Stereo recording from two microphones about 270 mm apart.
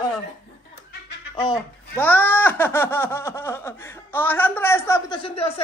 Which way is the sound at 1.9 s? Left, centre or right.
Centre.